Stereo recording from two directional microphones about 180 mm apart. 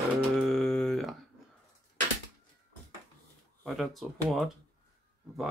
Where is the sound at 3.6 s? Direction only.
Centre (ahead or behind).